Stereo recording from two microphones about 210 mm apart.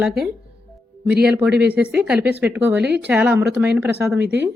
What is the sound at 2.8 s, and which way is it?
Speech, 50° right (ahead or behind).